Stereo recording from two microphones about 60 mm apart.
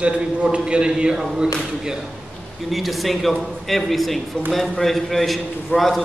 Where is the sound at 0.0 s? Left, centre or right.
Centre.